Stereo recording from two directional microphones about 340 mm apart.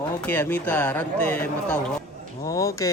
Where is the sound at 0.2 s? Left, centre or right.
Centre.